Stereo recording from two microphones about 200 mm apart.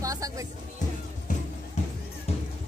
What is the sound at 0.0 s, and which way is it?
Music, 15° right (ahead or behind).